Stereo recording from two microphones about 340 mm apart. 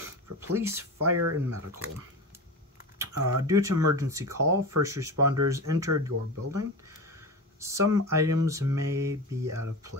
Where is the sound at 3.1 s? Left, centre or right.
Right.